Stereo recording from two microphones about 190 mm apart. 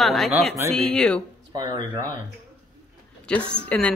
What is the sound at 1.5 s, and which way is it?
Speech, 20° right (ahead or behind).